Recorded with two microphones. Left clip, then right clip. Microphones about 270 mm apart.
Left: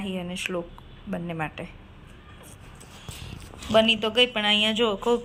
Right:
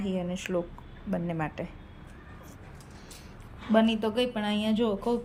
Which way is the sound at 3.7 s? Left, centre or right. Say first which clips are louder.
Left 6 dB; centre.